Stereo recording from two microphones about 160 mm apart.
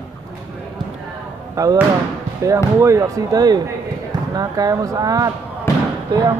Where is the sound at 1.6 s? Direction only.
20° right (ahead or behind).